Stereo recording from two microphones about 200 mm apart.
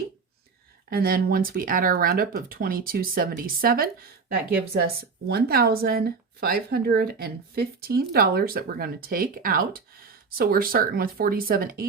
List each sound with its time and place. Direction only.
0.9 s speech: 50° right (ahead or behind)